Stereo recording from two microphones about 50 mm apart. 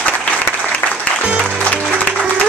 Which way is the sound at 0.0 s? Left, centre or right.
Left.